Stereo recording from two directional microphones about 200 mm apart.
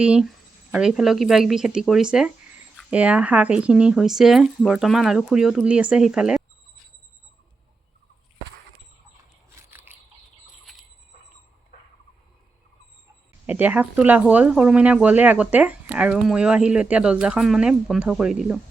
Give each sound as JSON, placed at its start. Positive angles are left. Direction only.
{"t": 0.0, "sound": "speech", "side_deg": -5}
{"t": 9.6, "sound": "biting", "side_deg": -10}
{"t": 11.7, "sound": "a sound", "side_deg": 50}
{"t": 13.5, "sound": "speech", "side_deg": -10}